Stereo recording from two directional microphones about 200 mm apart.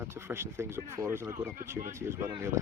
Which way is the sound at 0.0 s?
10° right (ahead or behind).